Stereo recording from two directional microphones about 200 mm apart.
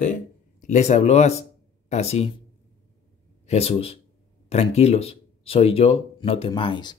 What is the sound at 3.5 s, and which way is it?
Speech, 30° left (ahead or behind).